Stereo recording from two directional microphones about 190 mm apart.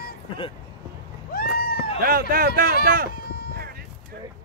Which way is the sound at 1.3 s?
50° left (ahead or behind).